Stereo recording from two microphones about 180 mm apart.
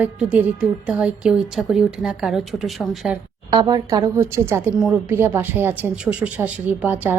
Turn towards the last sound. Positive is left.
turn(degrees=-10)  # may be behind; listen again after turning